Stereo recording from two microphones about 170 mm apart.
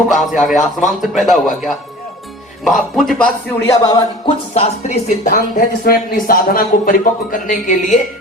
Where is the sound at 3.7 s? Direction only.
25° left (ahead or behind).